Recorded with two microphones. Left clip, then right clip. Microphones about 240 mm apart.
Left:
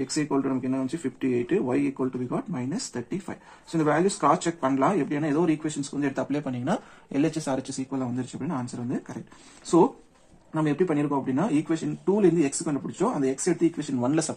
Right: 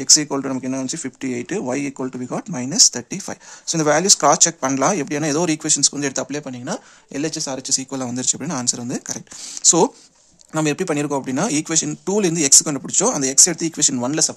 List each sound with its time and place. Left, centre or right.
0.1 s speech: right
6.3 s speech: right
7.9 s speech: right
10.5 s speech: right